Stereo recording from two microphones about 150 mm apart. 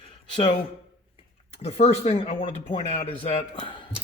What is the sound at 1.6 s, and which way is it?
Speech, 45° left (ahead or behind).